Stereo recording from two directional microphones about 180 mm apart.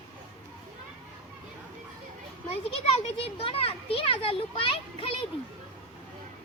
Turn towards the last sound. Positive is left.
turn(degrees=30)  # may be behind; listen again after turning